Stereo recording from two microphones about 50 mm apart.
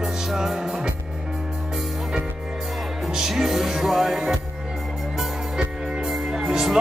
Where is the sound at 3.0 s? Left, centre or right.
Centre.